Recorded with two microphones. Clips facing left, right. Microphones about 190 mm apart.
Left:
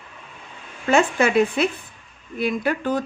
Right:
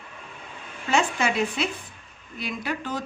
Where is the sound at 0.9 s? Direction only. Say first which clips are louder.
Left 6 dB; 55° left (ahead or behind).